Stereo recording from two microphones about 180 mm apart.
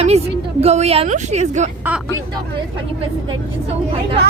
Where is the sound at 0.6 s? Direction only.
35° right (ahead or behind).